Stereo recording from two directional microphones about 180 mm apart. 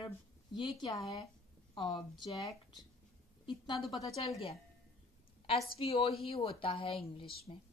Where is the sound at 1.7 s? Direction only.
25° left (ahead or behind).